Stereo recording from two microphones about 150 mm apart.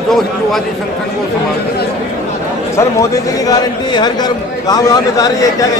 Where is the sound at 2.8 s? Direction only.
25° left (ahead or behind).